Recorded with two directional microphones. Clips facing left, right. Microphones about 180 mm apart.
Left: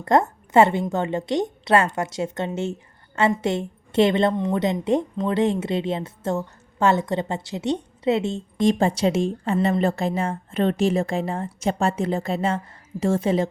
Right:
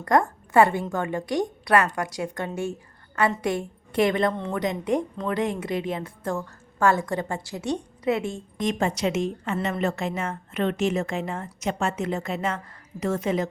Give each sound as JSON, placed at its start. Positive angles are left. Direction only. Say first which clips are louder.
{"t": 0.0, "sound": "speech", "louder": "left 2 dB", "side_deg": 25}